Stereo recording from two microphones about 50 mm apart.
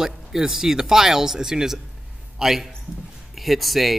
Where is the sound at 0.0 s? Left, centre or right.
Centre.